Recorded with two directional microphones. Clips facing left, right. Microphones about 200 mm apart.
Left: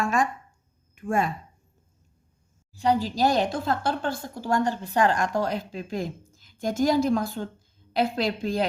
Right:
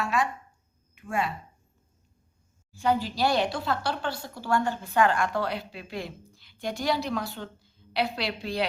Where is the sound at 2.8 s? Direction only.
40° left (ahead or behind).